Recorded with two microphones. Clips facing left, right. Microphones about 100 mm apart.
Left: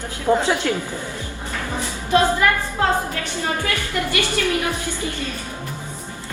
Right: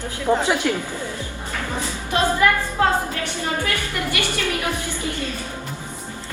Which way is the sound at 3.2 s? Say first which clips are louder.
Left 1 dB; 20° right (ahead or behind).